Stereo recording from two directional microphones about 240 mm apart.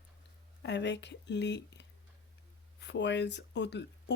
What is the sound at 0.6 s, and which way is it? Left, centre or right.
Speech, left.